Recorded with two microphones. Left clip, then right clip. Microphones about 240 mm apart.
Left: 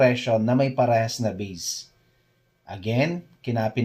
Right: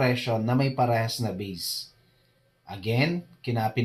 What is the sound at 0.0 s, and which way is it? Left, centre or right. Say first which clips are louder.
Speech: left 6 dB; left.